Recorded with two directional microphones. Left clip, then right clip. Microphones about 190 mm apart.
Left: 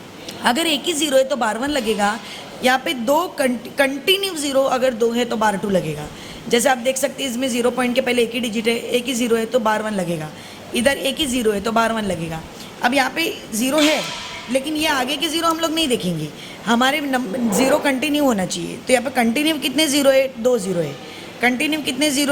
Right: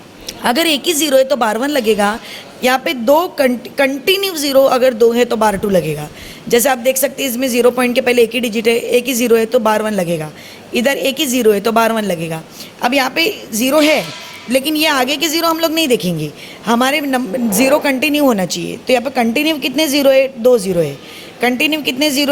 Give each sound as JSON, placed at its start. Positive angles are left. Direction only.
{"t": 0.4, "sound": "a woman's voice", "side_deg": -35}